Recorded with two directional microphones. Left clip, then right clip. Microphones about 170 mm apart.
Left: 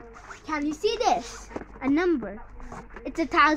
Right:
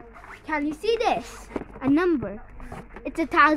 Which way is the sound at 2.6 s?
60° right (ahead or behind).